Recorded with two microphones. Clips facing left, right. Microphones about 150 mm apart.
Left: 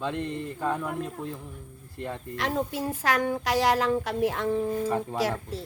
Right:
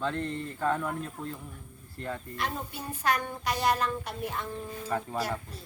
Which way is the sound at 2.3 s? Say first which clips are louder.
Left 11 dB; 90° left.